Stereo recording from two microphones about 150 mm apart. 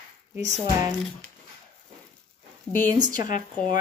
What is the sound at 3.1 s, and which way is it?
Speech, 60° left (ahead or behind).